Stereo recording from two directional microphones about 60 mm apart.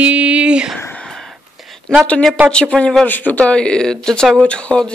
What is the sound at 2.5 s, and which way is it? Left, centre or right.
Speech, centre.